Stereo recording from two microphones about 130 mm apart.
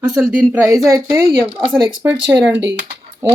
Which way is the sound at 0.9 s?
25° right (ahead or behind).